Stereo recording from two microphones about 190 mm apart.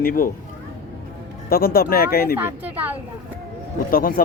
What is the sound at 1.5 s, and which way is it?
Speech, 50° left (ahead or behind).